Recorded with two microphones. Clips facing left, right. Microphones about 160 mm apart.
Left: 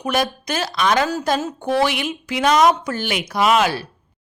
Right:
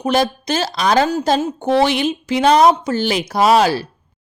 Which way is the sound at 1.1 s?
25° right (ahead or behind).